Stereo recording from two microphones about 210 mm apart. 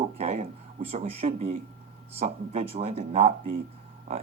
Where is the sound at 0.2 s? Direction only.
30° right (ahead or behind).